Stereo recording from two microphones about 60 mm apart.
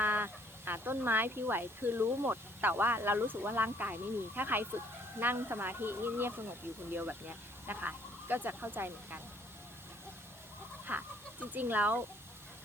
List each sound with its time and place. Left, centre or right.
0.0 s speech: right
10.9 s speech: right